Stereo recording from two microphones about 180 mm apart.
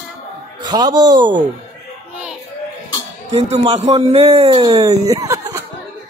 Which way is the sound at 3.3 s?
35° right (ahead or behind).